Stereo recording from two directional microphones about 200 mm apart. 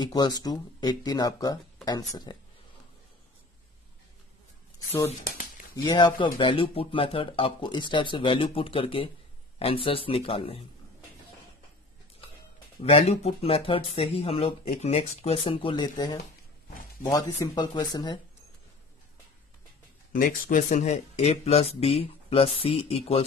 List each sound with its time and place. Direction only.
0.0 s speech: 20° left (ahead or behind)
4.7 s a sound: 15° left (ahead or behind)
5.1 s a sound: 45° left (ahead or behind)
5.8 s speech: 20° left (ahead or behind)
12.8 s speech: 30° left (ahead or behind)
20.1 s speech: 40° left (ahead or behind)